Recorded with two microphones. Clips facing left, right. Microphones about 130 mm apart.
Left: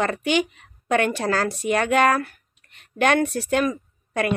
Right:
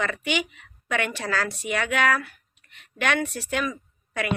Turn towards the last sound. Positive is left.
turn(degrees=40)  # may be behind; listen again after turning